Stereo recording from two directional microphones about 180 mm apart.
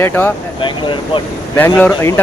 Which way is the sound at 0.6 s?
25° left (ahead or behind).